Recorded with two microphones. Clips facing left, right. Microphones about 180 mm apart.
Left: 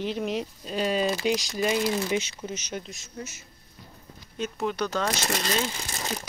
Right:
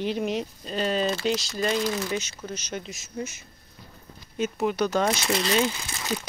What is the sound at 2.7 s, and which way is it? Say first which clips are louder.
Speech: right 1 dB; centre (ahead or behind).